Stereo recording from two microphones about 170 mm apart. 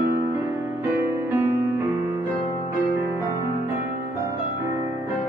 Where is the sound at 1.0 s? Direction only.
15° right (ahead or behind).